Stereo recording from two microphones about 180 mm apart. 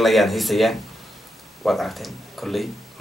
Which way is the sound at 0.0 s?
Centre (ahead or behind).